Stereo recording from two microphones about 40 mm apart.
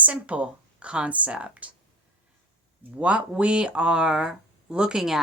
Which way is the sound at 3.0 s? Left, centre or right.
Right.